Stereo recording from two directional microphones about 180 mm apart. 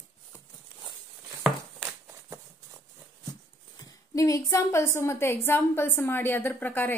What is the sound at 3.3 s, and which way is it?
Speech, 20° left (ahead or behind).